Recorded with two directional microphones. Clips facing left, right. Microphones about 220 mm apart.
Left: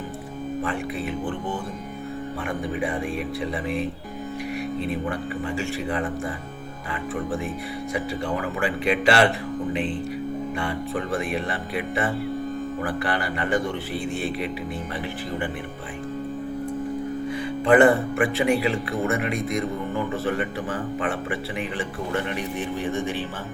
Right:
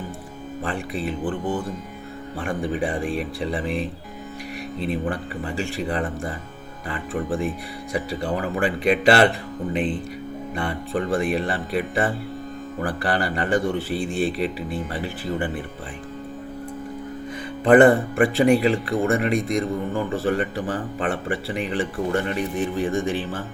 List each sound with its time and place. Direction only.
0.6 s a man's voice: 35° right (ahead or behind)
2.4 s a man's voice: 30° right (ahead or behind)
5.0 s a man's voice: 35° right (ahead or behind)
10.6 s a man's voice: 35° right (ahead or behind)
17.7 s a man's voice: 35° right (ahead or behind)